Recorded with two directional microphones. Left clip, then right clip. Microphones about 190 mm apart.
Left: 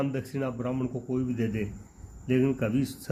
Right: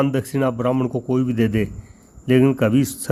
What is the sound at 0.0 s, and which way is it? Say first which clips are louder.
Speech: right 11 dB; 50° right (ahead or behind).